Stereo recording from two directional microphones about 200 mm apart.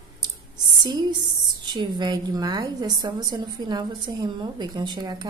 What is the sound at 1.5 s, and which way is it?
A woman's voice, 20° right (ahead or behind).